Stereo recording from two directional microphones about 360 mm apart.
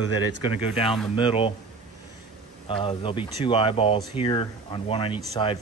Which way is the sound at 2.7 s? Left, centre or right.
Centre.